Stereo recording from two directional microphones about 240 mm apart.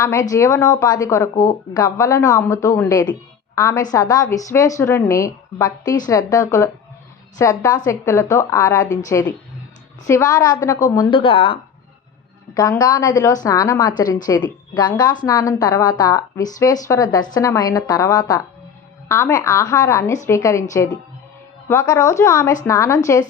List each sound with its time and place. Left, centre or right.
0.0 s a woman's voice: centre